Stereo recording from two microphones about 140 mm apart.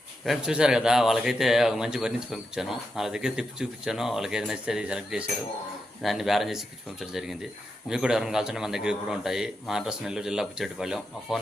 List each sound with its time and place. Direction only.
0.3 s a man's voice: 5° right (ahead or behind)